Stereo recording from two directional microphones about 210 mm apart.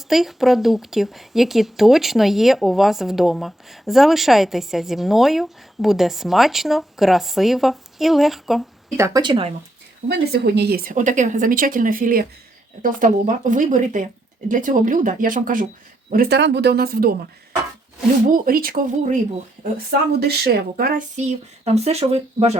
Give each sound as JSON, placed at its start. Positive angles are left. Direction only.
{"t": 0.1, "sound": "speech", "side_deg": 0}
{"t": 9.0, "sound": "speech", "side_deg": -15}
{"t": 10.1, "sound": "speech", "side_deg": -50}
{"t": 18.3, "sound": "speech", "side_deg": -45}